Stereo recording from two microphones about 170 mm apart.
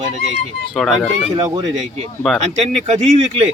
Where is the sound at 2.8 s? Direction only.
40° right (ahead or behind).